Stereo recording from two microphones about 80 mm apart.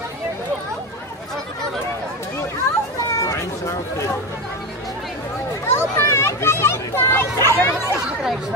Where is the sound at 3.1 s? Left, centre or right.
Left.